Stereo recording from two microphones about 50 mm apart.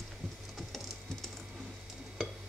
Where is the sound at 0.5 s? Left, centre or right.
Centre.